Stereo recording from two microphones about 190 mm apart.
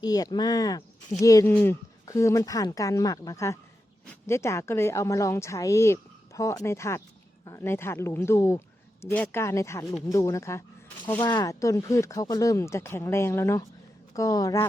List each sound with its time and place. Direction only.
0.0 s a woman's voice: 20° left (ahead or behind)